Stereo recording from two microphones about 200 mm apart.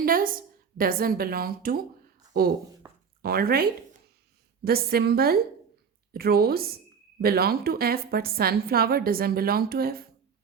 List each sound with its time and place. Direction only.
0.0 s a sound: 45° right (ahead or behind)
0.8 s a woman's voice: 45° right (ahead or behind)
3.2 s a woman's voice: 50° right (ahead or behind)